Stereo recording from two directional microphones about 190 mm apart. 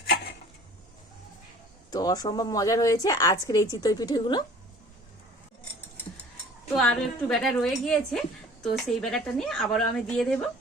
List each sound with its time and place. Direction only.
1.9 s a woman's voice: 20° left (ahead or behind)
6.7 s a woman's voice: 5° left (ahead or behind)